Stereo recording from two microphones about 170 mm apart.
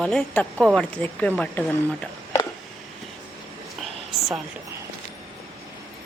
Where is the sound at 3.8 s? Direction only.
Centre (ahead or behind).